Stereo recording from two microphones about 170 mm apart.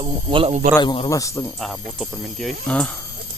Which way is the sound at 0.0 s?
30° right (ahead or behind).